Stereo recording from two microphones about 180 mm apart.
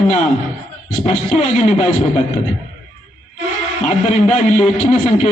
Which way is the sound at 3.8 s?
40° left (ahead or behind).